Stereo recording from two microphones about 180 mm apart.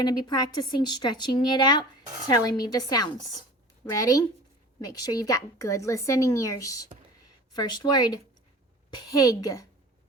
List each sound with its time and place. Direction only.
0.0 s speech: 25° left (ahead or behind)